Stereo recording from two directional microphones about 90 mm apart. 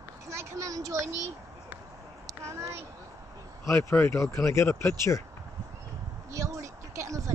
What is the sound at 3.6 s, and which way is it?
Speech, 30° left (ahead or behind).